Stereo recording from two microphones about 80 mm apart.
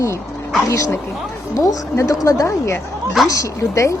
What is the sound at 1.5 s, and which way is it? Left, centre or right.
A woman's voice, left.